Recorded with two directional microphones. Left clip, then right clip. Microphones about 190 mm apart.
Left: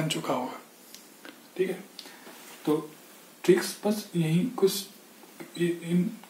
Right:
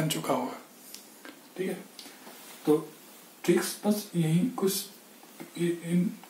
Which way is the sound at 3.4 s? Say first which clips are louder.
Left 3 dB; 10° right (ahead or behind).